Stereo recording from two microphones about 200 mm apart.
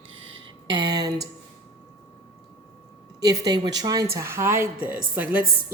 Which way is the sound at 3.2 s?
20° right (ahead or behind).